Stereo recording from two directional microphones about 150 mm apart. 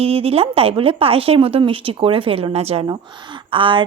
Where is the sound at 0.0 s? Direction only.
40° right (ahead or behind).